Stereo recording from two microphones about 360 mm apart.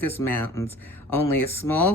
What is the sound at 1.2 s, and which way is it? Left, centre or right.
Speech, left.